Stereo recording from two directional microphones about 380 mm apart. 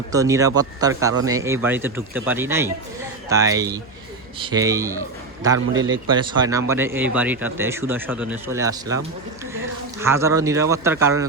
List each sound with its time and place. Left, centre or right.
0.1 s speech: centre
5.5 s a man's voice: right
6.1 s speech: centre
10.0 s speech: centre